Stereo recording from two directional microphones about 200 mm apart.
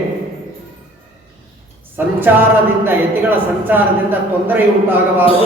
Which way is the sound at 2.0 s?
10° right (ahead or behind).